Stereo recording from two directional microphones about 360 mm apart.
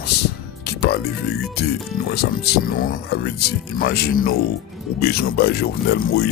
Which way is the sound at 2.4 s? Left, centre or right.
Left.